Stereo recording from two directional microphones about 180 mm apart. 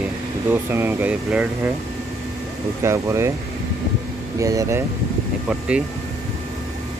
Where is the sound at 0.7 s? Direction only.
10° right (ahead or behind).